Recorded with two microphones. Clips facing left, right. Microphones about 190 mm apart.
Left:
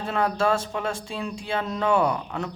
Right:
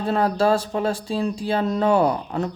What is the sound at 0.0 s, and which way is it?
Speech, 35° right (ahead or behind).